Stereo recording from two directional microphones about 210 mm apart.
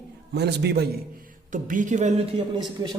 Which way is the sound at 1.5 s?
40° right (ahead or behind).